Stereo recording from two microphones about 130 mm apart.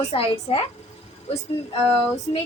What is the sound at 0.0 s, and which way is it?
Speech, 50° left (ahead or behind).